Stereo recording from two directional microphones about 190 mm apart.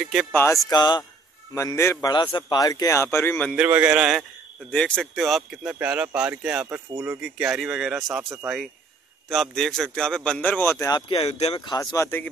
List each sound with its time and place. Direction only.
0.0 s speech: centre (ahead or behind)
0.3 s a man's voice: 10° left (ahead or behind)
0.7 s a man's voice: 20° left (ahead or behind)
3.5 s speech: 10° right (ahead or behind)
9.3 s a man's voice: centre (ahead or behind)